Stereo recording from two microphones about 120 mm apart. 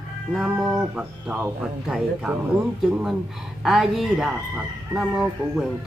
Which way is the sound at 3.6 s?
Centre (ahead or behind).